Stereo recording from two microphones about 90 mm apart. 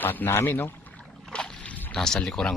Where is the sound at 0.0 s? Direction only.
20° left (ahead or behind).